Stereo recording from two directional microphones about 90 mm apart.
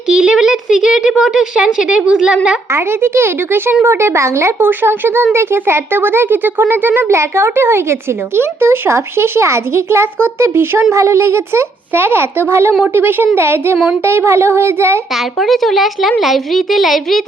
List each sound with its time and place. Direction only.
0.1 s speech: 10° right (ahead or behind)
2.7 s speech: 30° right (ahead or behind)
15.1 s a woman's voice: centre (ahead or behind)